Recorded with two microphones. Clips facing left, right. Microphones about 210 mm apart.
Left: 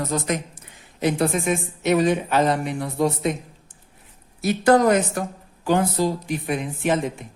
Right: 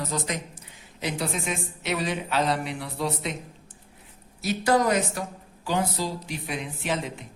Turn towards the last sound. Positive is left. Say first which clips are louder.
# left 7 dB
turn(degrees=50)  # may be behind; listen again after turning